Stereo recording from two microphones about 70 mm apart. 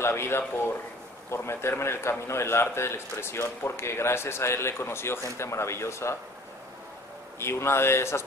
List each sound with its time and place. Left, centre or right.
0.0 s a man's voice: left
7.3 s a man's voice: left